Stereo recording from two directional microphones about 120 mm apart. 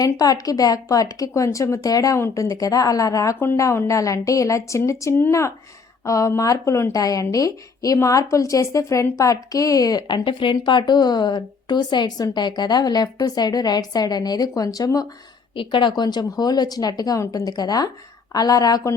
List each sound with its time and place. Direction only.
0.0 s a woman's voice: 30° left (ahead or behind)
15.5 s a woman's voice: 40° left (ahead or behind)